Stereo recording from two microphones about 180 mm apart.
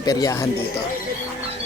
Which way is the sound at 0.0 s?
20° left (ahead or behind).